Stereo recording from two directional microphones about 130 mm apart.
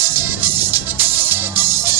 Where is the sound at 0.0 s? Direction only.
15° right (ahead or behind).